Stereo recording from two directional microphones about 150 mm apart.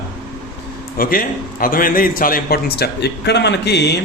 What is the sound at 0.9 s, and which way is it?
A man's voice, 70° left (ahead or behind).